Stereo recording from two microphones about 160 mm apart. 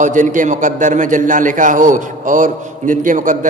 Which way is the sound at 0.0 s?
50° right (ahead or behind).